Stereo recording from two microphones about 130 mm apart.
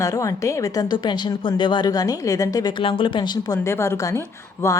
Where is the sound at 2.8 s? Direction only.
45° left (ahead or behind).